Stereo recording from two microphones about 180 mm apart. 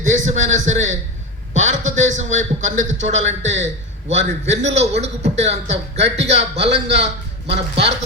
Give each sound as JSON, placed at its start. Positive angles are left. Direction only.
{"t": 0.0, "sound": "a man's voice", "side_deg": -40}
{"t": 6.7, "sound": "a man's voice", "side_deg": -75}